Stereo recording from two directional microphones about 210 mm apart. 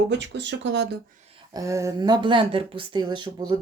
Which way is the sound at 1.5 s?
15° right (ahead or behind).